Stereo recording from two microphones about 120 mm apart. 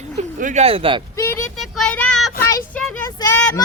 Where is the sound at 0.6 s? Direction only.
50° right (ahead or behind).